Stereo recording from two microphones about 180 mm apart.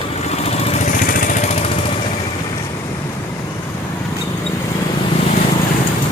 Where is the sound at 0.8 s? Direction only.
50° left (ahead or behind).